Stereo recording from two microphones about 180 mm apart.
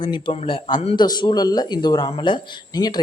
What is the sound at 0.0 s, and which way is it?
Speech, 25° left (ahead or behind).